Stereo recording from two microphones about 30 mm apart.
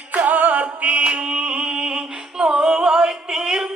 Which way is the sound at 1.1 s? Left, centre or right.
Right.